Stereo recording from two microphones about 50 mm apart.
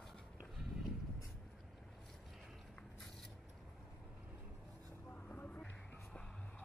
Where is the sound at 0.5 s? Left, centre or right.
Centre.